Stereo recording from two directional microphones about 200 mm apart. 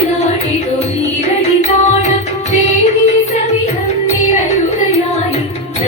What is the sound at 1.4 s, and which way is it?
Music, 35° left (ahead or behind).